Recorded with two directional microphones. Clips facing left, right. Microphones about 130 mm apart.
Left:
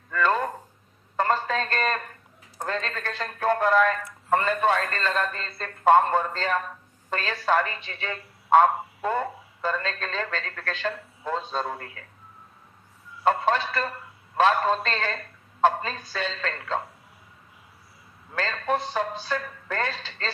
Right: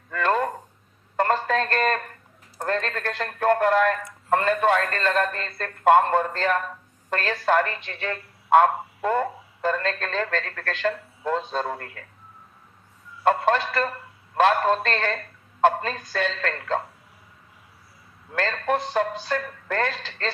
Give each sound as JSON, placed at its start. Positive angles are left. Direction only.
{"t": 0.1, "sound": "a sound", "side_deg": -50}
{"t": 2.6, "sound": "speech", "side_deg": -50}
{"t": 13.2, "sound": "speech", "side_deg": -50}
{"t": 18.3, "sound": "speech", "side_deg": -45}